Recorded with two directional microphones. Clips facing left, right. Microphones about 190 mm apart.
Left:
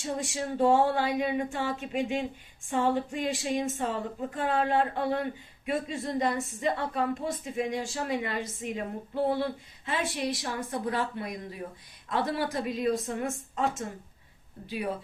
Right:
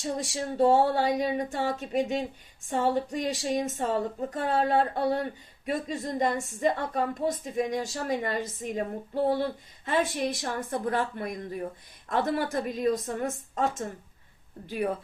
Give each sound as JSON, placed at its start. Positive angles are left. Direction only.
{"t": 0.0, "sound": "a woman's voice", "side_deg": -35}
{"t": 9.8, "sound": "speech", "side_deg": -45}